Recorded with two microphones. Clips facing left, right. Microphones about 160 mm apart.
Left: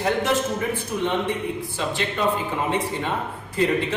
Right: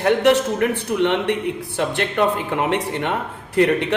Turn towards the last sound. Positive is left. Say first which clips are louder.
# right 5 dB
turn(degrees=-70)  # may be behind; listen again after turning